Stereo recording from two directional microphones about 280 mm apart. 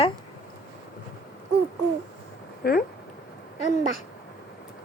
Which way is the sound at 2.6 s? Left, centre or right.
Left.